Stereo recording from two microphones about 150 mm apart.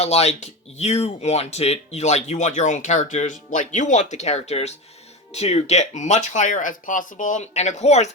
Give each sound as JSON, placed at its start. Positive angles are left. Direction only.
{"t": 0.0, "sound": "speech", "side_deg": 45}